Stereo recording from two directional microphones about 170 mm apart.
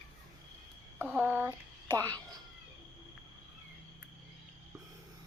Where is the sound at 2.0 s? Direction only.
20° right (ahead or behind).